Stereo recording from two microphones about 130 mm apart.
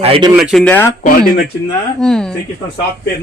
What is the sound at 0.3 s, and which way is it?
Speech, 5° right (ahead or behind).